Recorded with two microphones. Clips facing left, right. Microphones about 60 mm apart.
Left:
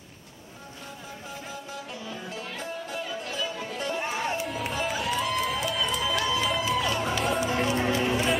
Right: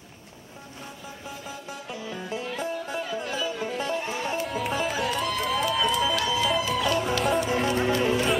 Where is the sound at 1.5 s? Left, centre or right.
Right.